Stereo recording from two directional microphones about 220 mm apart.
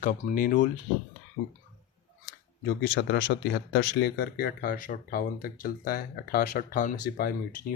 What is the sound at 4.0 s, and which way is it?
Speech, 45° left (ahead or behind).